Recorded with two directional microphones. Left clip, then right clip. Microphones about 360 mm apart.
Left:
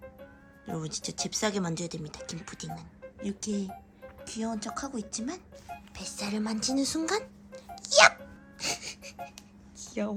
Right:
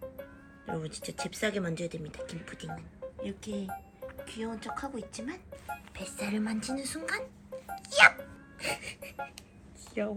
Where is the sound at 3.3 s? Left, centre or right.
Centre.